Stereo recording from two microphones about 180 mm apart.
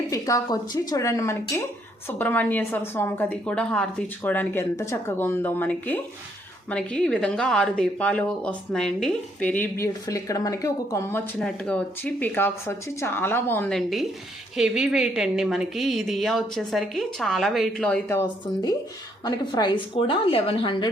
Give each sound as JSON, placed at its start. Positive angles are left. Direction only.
{"t": 0.1, "sound": "a woman's voice", "side_deg": 20}
{"t": 11.3, "sound": "a woman's voice", "side_deg": 5}
{"t": 19.2, "sound": "a woman's voice", "side_deg": 25}